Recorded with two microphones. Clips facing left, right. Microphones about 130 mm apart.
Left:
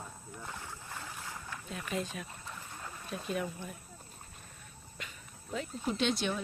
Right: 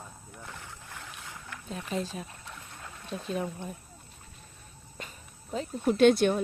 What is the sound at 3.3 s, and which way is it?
Speech, 30° right (ahead or behind).